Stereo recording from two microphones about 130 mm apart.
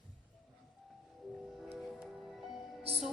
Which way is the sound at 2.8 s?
50° right (ahead or behind).